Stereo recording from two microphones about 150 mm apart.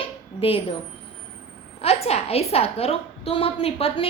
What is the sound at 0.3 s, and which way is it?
Speech, 40° left (ahead or behind).